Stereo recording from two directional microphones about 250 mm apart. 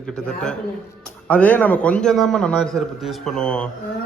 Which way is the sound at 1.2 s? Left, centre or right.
Centre.